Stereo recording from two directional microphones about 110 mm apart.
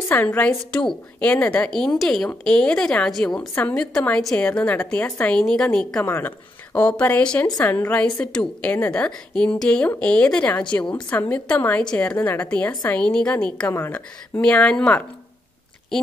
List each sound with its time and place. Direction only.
0.1 s a woman's voice: 15° left (ahead or behind)
5.3 s a woman's voice: 5° left (ahead or behind)
6.0 s a woman's voice: 20° left (ahead or behind)
13.7 s a woman's voice: 20° left (ahead or behind)
14.4 s a woman's voice: 10° left (ahead or behind)